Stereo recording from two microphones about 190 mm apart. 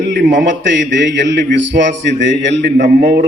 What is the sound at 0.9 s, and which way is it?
A man's voice, 70° right (ahead or behind).